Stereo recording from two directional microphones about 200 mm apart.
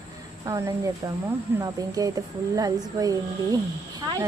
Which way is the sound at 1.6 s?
15° right (ahead or behind).